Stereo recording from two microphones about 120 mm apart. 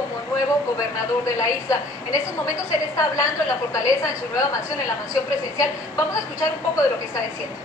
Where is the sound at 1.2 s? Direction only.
25° left (ahead or behind).